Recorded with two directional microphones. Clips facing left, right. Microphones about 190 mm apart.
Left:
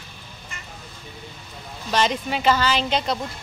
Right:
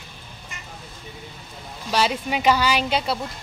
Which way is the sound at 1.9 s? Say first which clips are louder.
Even; 10° right (ahead or behind).